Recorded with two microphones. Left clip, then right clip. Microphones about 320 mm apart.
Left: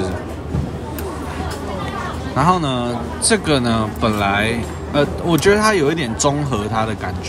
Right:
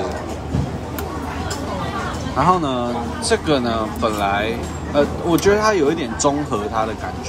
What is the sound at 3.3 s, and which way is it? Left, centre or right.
Speech, left.